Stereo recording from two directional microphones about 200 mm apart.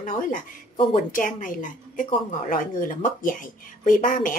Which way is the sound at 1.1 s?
40° left (ahead or behind).